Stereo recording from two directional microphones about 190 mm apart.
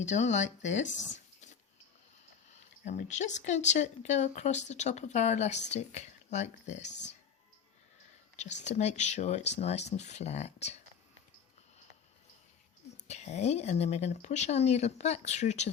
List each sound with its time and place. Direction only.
0.0 s speech: 40° left (ahead or behind)
2.5 s a sound: 35° left (ahead or behind)
3.0 s speech: 40° left (ahead or behind)
8.4 s speech: 35° left (ahead or behind)
13.1 s speech: 35° left (ahead or behind)